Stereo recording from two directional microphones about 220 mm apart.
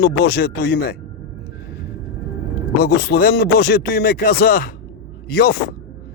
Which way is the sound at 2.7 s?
50° left (ahead or behind).